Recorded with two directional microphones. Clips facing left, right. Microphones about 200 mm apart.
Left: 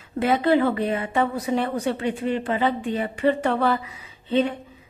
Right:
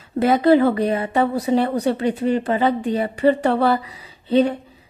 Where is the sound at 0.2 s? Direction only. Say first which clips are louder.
Right 5 dB; 40° right (ahead or behind).